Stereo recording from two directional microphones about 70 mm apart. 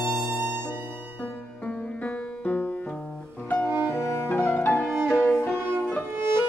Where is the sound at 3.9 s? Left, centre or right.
Left.